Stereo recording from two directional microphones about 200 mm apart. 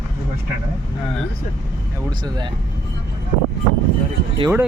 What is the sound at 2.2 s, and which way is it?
Speech, 20° right (ahead or behind).